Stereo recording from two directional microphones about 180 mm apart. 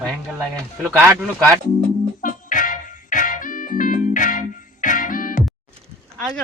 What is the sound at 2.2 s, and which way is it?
Music, 45° left (ahead or behind).